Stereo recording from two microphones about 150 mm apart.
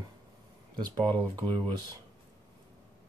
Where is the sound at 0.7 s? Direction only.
35° right (ahead or behind).